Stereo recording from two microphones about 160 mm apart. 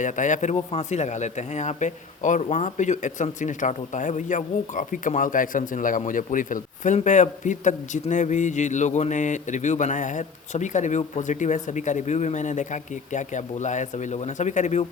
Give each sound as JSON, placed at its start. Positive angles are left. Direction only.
{"t": 0.0, "sound": "speech", "side_deg": 50}